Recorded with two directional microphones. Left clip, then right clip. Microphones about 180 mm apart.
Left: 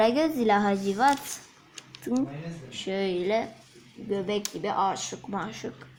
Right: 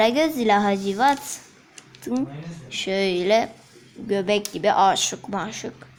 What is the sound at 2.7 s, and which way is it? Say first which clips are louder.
Speech: right 6 dB; 10° right (ahead or behind).